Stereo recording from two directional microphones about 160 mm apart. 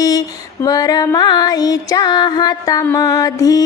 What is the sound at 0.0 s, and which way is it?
Music, 20° left (ahead or behind).